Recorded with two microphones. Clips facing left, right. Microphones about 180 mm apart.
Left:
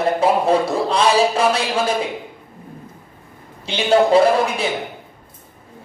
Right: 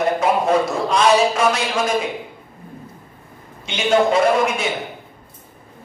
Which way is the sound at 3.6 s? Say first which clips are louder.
Left 1 dB; 30° left (ahead or behind).